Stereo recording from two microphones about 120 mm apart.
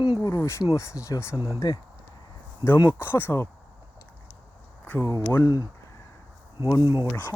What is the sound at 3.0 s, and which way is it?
Speech, 20° left (ahead or behind).